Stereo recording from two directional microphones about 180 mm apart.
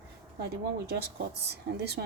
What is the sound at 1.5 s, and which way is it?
Speech, 65° right (ahead or behind).